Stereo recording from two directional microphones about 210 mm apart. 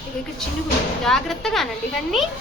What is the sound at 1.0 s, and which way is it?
Speech, centre (ahead or behind).